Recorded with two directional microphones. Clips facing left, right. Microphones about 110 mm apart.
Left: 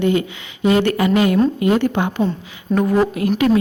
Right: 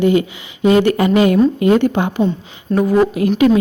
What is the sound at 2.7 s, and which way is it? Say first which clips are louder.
Speech: right 2 dB; centre (ahead or behind).